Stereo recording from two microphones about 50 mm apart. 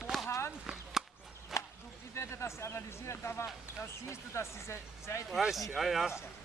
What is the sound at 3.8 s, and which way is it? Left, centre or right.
Speech, left.